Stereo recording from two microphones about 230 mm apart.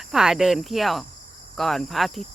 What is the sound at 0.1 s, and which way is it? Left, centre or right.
Cricket, centre.